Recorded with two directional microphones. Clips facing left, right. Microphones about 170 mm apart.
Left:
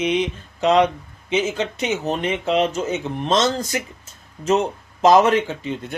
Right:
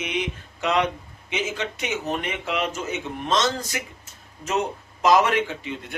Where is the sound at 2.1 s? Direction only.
30° left (ahead or behind).